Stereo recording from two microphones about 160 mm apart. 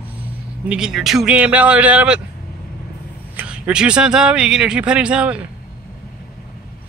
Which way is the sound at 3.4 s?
5° right (ahead or behind).